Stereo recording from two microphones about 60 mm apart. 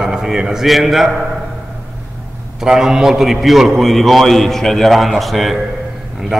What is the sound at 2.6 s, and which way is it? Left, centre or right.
A man's voice, centre.